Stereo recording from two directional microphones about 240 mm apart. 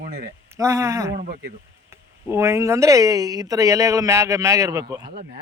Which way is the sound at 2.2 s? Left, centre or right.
Centre.